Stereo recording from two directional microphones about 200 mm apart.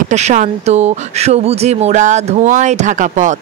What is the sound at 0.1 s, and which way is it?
Speech, 35° right (ahead or behind).